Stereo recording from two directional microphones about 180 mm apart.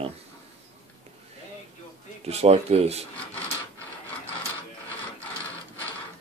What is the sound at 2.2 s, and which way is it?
Speech, 35° right (ahead or behind).